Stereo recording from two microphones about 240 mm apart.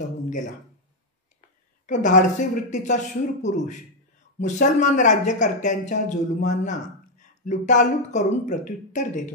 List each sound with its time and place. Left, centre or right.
1.9 s a man's voice: left